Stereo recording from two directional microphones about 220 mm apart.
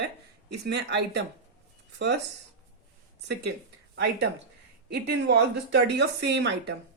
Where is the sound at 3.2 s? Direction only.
50° right (ahead or behind).